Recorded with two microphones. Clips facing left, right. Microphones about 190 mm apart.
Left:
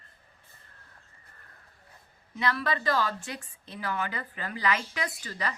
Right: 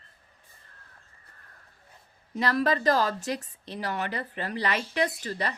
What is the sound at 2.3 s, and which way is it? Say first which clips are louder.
Speech: right 4 dB; 40° right (ahead or behind).